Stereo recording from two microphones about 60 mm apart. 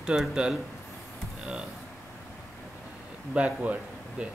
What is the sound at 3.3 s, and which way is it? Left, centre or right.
Speech, right.